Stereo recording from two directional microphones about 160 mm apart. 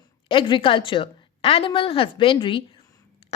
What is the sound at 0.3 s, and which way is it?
A woman's voice, 30° left (ahead or behind).